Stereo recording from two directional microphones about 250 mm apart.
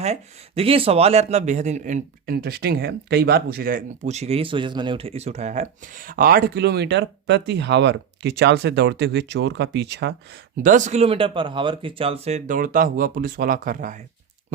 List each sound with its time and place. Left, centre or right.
0.0 s speech: right
10.6 s speech: right